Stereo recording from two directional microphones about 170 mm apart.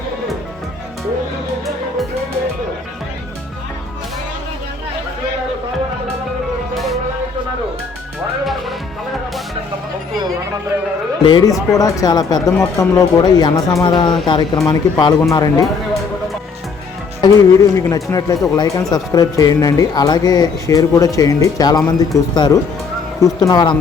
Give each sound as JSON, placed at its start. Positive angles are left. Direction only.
{"t": 11.3, "sound": "speech", "side_deg": 25}
{"t": 17.2, "sound": "speech", "side_deg": 25}